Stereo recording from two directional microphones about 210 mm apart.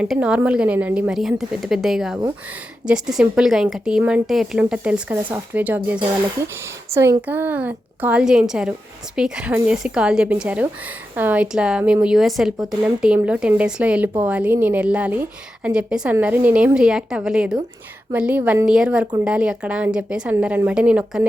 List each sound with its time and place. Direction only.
0.0 s a woman's voice: 5° right (ahead or behind)